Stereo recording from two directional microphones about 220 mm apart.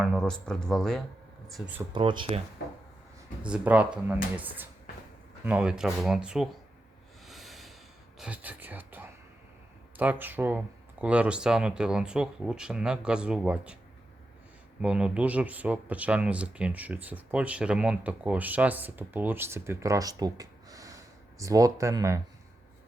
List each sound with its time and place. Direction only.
0.0 s speech: centre (ahead or behind)
1.9 s speech: 20° right (ahead or behind)
3.4 s speech: 5° right (ahead or behind)
7.3 s snort: centre (ahead or behind)
8.2 s speech: 5° right (ahead or behind)
14.8 s speech: 5° right (ahead or behind)